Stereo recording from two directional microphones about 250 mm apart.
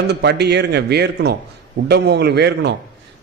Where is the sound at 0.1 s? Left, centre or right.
Right.